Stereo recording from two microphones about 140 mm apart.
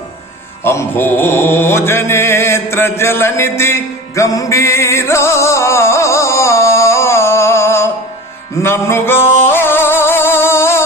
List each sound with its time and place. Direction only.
0.6 s mantra: 15° left (ahead or behind)
8.6 s music: 15° left (ahead or behind)